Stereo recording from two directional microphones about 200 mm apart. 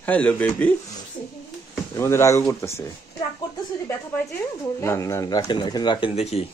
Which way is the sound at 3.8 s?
10° left (ahead or behind).